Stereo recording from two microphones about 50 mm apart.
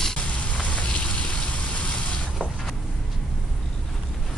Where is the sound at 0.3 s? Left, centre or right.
Left.